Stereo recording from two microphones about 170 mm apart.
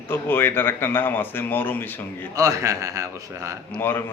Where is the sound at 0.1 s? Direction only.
10° left (ahead or behind).